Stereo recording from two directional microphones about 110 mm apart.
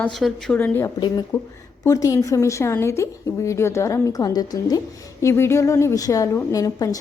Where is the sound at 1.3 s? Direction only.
35° left (ahead or behind).